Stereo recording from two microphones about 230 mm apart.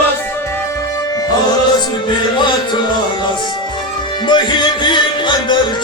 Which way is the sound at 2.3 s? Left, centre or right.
Centre.